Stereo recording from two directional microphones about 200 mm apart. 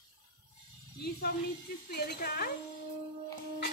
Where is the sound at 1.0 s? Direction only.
50° left (ahead or behind).